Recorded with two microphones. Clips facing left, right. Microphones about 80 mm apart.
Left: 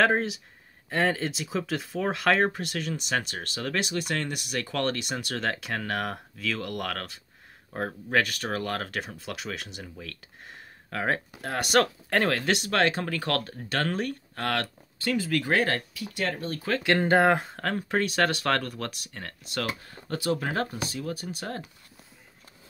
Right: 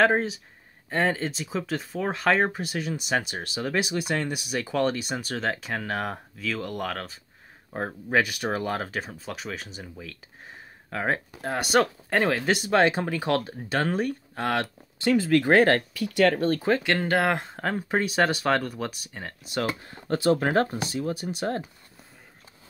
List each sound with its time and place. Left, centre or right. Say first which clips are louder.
0.0 s speech: right 2 dB; centre
9.0 s speech: right 1 dB; centre
15.0 s speech: right 6 dB; right
15.9 s speech: right 9 dB; right
17.0 s speech: left 3 dB; left
17.3 s speech: left 3 dB; centre
17.6 s speech: right 1 dB; centre
19.6 s speech: right 3 dB; right